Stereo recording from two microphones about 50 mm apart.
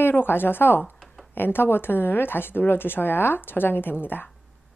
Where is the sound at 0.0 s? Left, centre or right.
Left.